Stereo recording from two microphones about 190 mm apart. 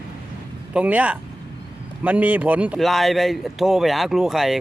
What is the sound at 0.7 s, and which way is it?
A man's voice, 5° right (ahead or behind).